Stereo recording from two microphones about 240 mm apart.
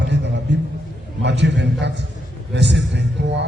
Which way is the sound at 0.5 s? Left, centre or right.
Right.